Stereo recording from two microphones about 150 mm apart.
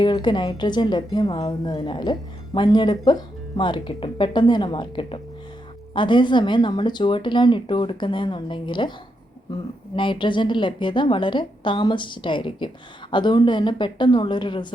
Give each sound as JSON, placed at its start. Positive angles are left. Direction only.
{"t": 0.0, "sound": "a woman's voice", "side_deg": 30}
{"t": 9.9, "sound": "a woman's voice", "side_deg": 35}